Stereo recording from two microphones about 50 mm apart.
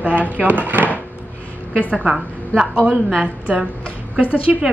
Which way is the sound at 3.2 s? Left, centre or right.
Right.